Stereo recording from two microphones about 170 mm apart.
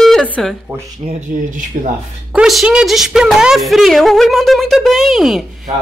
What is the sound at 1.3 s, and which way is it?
Speech, 50° right (ahead or behind).